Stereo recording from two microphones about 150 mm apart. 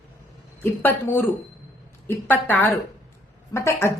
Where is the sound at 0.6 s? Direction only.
15° left (ahead or behind).